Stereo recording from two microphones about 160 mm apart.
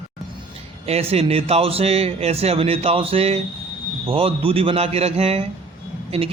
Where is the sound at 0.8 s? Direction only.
40° right (ahead or behind).